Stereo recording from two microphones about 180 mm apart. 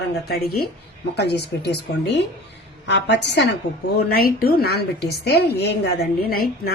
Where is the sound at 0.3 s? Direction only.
60° left (ahead or behind); by 3.2 s 75° left (ahead or behind).